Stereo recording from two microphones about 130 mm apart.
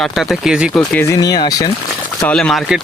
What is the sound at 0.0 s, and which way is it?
Speech, centre (ahead or behind).